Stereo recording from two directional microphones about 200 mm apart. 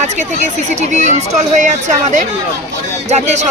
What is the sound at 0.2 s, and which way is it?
Speech, 35° right (ahead or behind).